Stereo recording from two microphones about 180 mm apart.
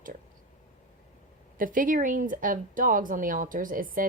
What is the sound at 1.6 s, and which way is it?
Speech, 50° right (ahead or behind).